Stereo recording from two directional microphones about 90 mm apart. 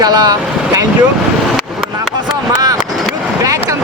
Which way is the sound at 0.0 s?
50° right (ahead or behind).